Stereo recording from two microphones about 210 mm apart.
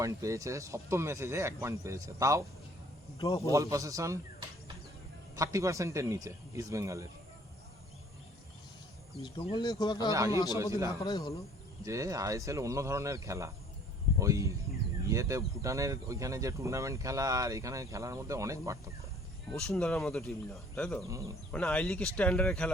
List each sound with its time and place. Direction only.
0.0 s speech: 15° right (ahead or behind)
3.2 s a man's voice: 15° left (ahead or behind)
3.5 s speech: 15° right (ahead or behind)
9.1 s speech: 25° left (ahead or behind)
10.1 s speech: 15° right (ahead or behind)
11.0 s speech: 20° left (ahead or behind)
11.8 s speech: 15° right (ahead or behind)
19.5 s speech: 5° left (ahead or behind)
21.1 s speech: 15° right (ahead or behind)
21.5 s speech: 5° left (ahead or behind)